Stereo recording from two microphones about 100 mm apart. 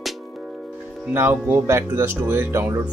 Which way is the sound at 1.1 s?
25° right (ahead or behind).